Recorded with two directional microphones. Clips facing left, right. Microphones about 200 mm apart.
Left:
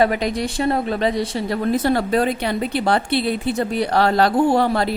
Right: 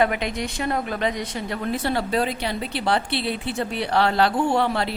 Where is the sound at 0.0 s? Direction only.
35° left (ahead or behind).